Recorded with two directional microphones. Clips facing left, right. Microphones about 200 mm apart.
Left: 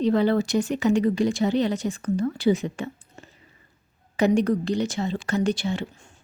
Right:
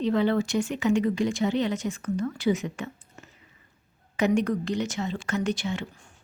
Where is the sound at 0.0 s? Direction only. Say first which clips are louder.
Left 3 dB; 35° left (ahead or behind).